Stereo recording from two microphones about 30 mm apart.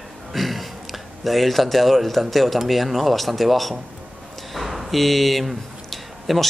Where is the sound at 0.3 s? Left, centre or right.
Centre.